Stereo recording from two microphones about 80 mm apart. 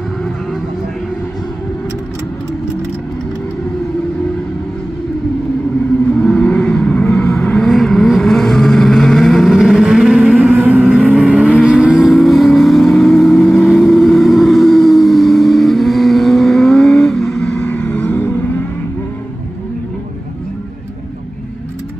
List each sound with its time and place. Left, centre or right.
6.0 s vehicle: centre
10.5 s vehicle: centre; by 18.5 s left